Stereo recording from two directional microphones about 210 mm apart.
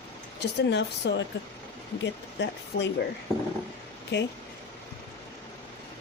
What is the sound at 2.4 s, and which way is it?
Speech, 55° left (ahead or behind).